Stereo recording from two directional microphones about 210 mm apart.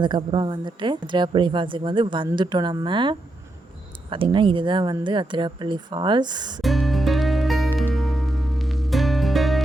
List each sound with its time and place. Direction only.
0.0 s speech: 20° right (ahead or behind)
6.6 s music: centre (ahead or behind)